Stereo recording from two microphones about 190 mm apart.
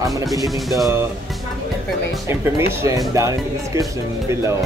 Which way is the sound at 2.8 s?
15° right (ahead or behind).